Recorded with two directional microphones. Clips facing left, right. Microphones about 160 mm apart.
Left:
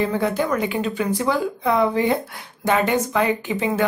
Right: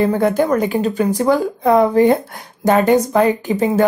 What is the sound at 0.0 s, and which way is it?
Speech, 45° right (ahead or behind).